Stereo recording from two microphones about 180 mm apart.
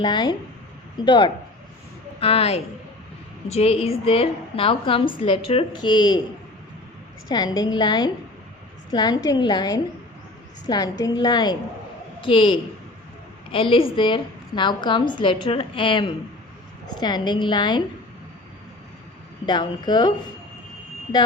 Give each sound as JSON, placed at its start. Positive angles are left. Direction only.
{"t": 0.0, "sound": "a woman's voice", "side_deg": 25}
{"t": 7.3, "sound": "a woman's voice", "side_deg": 20}
{"t": 19.5, "sound": "a woman's voice", "side_deg": 25}